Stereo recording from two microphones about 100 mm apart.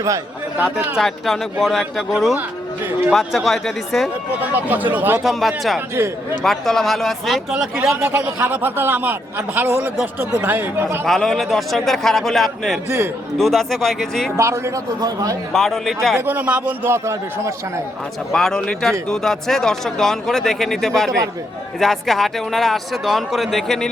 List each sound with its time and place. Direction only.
0.9 s speech: centre (ahead or behind)
3.1 s speech: centre (ahead or behind)
4.5 s a man's voice: 20° right (ahead or behind)
5.2 s speech: centre (ahead or behind)
7.5 s speech: 10° right (ahead or behind)
8.0 s a man's voice: 20° right (ahead or behind)
11.0 s speech: 5° left (ahead or behind)
14.3 s a man's voice: 30° right (ahead or behind)
15.0 s a man's voice: 40° right (ahead or behind)
15.5 s speech: centre (ahead or behind)
16.1 s a man's voice: 20° right (ahead or behind)
18.3 s speech: 5° left (ahead or behind)